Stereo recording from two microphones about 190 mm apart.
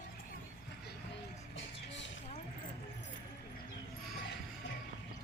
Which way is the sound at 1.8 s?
70° left (ahead or behind).